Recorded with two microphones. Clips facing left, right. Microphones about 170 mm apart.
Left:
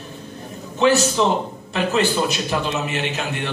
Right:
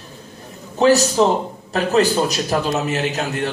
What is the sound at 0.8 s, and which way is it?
A man's voice, 40° right (ahead or behind).